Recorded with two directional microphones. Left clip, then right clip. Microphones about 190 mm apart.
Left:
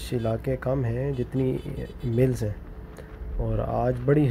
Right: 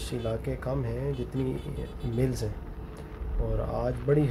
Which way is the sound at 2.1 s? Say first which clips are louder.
Left 6 dB; 35° left (ahead or behind).